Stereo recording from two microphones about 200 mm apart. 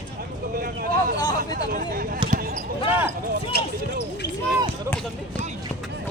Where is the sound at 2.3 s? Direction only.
45° right (ahead or behind).